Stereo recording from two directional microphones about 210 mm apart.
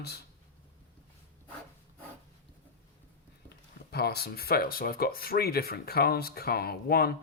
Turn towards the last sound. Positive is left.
turn(degrees=45)  # may be behind; listen again after turning